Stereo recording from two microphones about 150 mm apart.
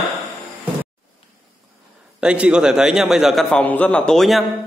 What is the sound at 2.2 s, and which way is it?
A man's voice, 5° right (ahead or behind).